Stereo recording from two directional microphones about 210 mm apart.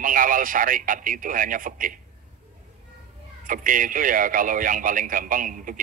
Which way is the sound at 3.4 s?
40° right (ahead or behind).